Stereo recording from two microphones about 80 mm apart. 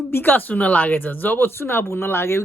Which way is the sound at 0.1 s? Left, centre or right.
Left.